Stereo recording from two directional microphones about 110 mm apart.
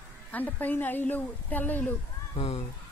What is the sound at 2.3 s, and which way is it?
Speech, 65° left (ahead or behind).